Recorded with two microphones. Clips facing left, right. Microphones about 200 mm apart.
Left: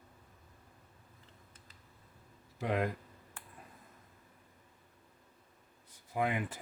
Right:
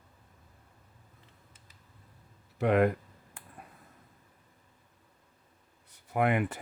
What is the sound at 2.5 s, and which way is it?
Speech, 65° right (ahead or behind).